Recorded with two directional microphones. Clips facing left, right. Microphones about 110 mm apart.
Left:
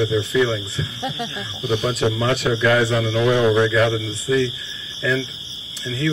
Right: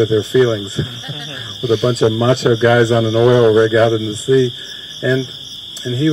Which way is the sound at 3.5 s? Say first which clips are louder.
Right 6 dB; 25° right (ahead or behind).